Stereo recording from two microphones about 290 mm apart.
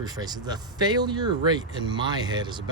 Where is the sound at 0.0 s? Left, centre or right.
Centre.